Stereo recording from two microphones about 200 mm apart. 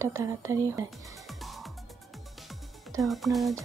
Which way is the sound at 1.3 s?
Centre (ahead or behind).